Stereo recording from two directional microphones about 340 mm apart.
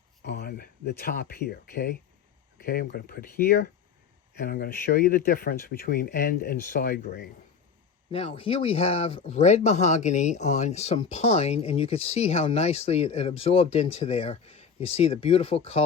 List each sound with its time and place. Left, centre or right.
0.3 s speech: left
8.1 s speech: centre